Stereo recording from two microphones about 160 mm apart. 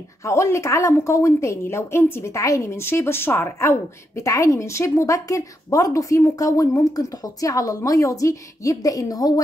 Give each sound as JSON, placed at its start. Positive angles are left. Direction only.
{"t": 0.2, "sound": "a woman's voice", "side_deg": 20}